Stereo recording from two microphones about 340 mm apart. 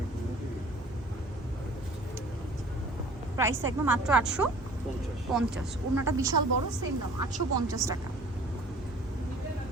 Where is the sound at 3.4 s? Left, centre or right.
Centre.